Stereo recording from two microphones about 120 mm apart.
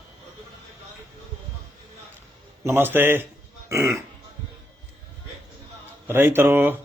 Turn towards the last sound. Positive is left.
turn(degrees=-15)  # may be behind; listen again after turning